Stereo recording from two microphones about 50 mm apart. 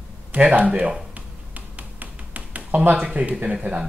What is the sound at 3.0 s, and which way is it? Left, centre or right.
Speech, right.